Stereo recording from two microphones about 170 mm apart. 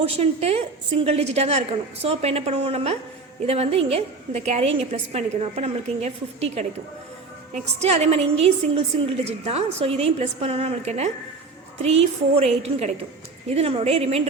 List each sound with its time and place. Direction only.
0.0 s a woman's voice: 35° right (ahead or behind)